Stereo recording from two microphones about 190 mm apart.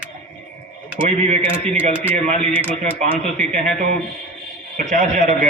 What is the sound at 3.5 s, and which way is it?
A man's voice, 45° right (ahead or behind).